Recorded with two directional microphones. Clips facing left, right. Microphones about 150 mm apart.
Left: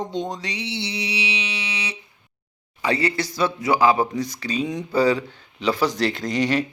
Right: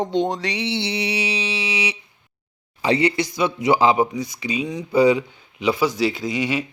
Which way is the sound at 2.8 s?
20° right (ahead or behind).